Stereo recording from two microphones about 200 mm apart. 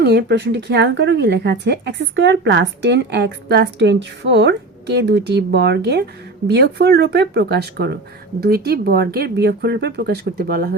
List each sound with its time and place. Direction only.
0.0 s speech: 55° right (ahead or behind)